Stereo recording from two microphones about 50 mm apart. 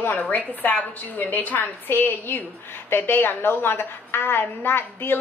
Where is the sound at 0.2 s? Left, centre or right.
Left.